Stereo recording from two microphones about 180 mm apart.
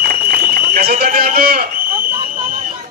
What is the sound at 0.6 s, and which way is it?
Run, 60° right (ahead or behind).